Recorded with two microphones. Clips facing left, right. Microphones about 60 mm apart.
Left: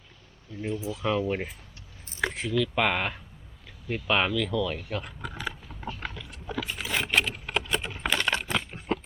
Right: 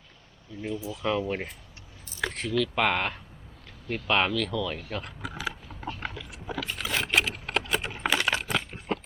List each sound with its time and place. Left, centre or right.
0.6 s speech: left
1.3 s speech: centre
2.2 s a sound: centre
2.5 s speech: centre
3.8 s mechanisms: centre
6.6 s vehicle: centre
7.2 s typing: centre